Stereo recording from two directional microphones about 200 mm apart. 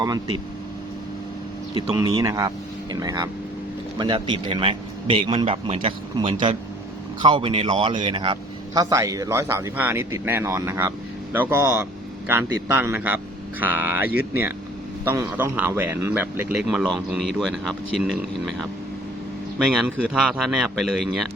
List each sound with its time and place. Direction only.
0.0 s a man's voice: 20° right (ahead or behind)
2.0 s a man's voice: 20° right (ahead or behind); by 18.2 s centre (ahead or behind)
19.5 s speech: 5° right (ahead or behind)